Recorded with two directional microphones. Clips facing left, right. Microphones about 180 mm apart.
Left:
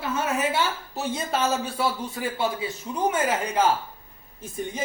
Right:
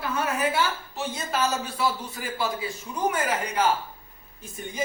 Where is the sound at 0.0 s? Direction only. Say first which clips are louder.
Left 1 dB; 25° left (ahead or behind).